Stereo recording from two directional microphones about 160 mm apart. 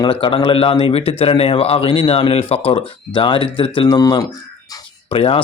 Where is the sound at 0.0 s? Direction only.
30° left (ahead or behind).